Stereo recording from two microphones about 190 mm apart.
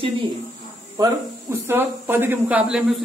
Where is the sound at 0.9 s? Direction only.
15° right (ahead or behind).